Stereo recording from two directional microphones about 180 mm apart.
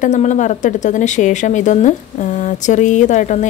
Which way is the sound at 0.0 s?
40° left (ahead or behind).